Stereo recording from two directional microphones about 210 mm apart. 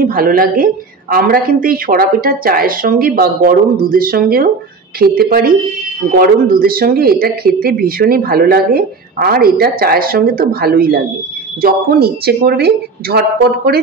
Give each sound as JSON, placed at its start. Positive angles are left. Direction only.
{"t": 0.0, "sound": "speech", "side_deg": -40}